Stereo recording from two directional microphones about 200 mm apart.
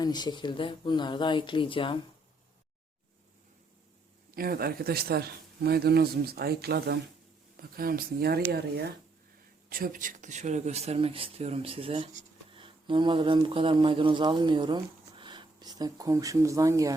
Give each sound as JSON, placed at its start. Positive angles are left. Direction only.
{"t": 0.0, "sound": "speech", "side_deg": 20}
{"t": 4.4, "sound": "speech", "side_deg": -50}
{"t": 9.6, "sound": "speech", "side_deg": -45}